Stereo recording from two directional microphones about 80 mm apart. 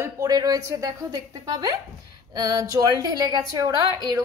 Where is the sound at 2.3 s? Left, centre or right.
Right.